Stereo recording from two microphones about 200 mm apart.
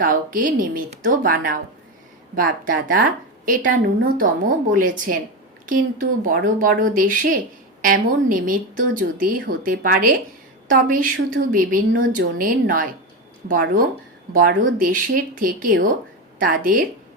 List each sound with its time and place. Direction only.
0.0 s a woman's voice: 40° right (ahead or behind)